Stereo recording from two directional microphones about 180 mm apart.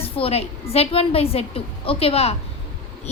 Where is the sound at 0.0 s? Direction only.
35° left (ahead or behind).